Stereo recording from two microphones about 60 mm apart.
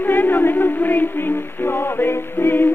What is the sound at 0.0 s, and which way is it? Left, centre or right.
Music, left.